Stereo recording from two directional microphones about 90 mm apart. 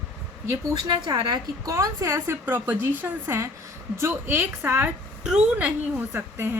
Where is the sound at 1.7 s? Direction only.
35° right (ahead or behind); by 6.5 s 20° right (ahead or behind).